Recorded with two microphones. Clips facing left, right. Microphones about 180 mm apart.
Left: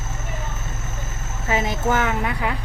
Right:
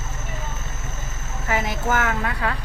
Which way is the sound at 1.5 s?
20° left (ahead or behind).